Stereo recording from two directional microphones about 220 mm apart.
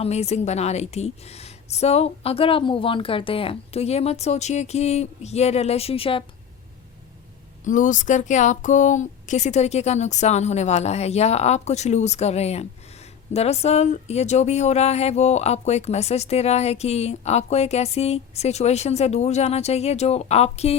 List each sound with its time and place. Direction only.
0.0 s speech: 30° left (ahead or behind)
7.6 s speech: 35° left (ahead or behind)